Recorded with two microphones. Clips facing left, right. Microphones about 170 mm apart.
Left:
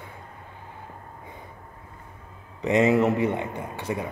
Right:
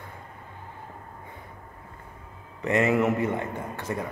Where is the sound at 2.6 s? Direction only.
20° left (ahead or behind).